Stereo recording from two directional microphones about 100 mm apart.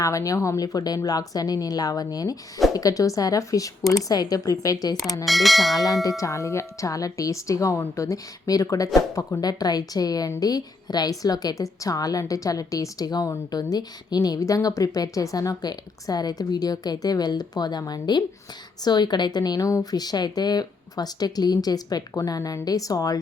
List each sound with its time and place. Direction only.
0.0 s a woman's voice: 35° left (ahead or behind)
5.2 s speech: centre (ahead or behind)
5.8 s a woman's voice: 35° left (ahead or behind)